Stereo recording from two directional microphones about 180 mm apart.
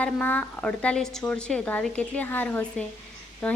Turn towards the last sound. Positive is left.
turn(degrees=5)  # may be behind; listen again after turning